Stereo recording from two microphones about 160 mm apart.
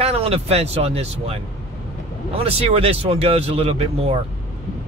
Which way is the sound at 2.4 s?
35° right (ahead or behind).